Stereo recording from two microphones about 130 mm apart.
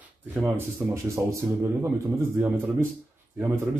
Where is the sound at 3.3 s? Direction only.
15° right (ahead or behind).